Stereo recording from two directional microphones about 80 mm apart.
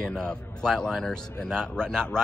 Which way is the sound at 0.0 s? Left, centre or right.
Centre.